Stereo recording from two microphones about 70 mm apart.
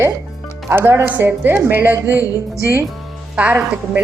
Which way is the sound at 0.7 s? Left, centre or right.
Right.